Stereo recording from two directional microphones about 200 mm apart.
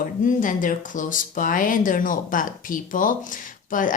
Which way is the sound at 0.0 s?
40° left (ahead or behind).